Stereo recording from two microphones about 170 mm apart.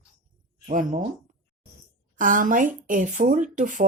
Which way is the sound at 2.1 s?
50° right (ahead or behind).